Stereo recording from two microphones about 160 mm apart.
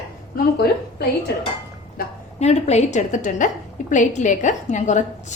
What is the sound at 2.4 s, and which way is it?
A woman's voice, 45° left (ahead or behind).